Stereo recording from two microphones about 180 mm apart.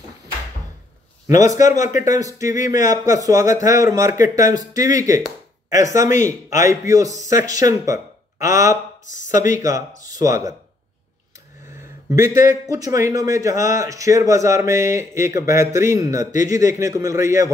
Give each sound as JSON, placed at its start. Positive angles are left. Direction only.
{"t": 1.3, "sound": "a man's voice", "side_deg": 40}
{"t": 2.0, "sound": "speech", "side_deg": -20}
{"t": 2.7, "sound": "a man's voice", "side_deg": 45}
{"t": 3.1, "sound": "speech", "side_deg": -20}
{"t": 12.1, "sound": "speech", "side_deg": -15}